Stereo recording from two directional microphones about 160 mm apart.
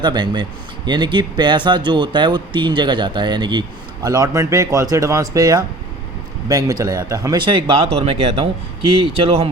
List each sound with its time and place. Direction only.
0.0 s speech: 25° right (ahead or behind)